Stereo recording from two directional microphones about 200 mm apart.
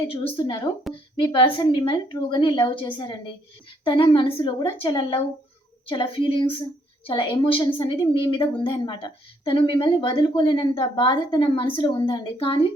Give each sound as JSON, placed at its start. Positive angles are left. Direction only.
{"t": 0.1, "sound": "a woman's voice", "side_deg": 25}